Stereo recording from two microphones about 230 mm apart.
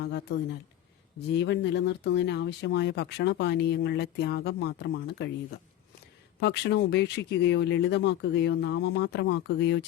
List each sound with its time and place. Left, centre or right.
0.0 s speech: left
1.4 s speech: left